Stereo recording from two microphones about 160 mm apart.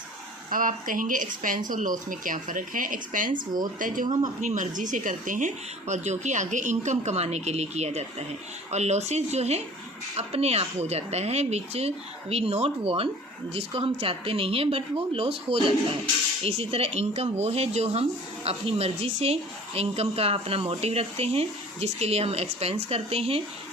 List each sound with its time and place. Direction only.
0.5 s a woman's voice: 55° right (ahead or behind); by 23.4 s 40° right (ahead or behind)